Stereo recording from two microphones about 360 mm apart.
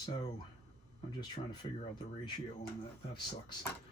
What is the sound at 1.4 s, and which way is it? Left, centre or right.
Speech, centre.